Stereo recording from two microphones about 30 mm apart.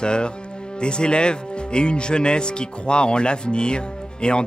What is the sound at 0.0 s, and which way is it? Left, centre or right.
Speech, left.